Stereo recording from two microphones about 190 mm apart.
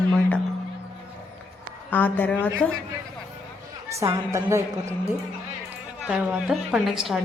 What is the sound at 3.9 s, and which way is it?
A woman's voice, 15° right (ahead or behind).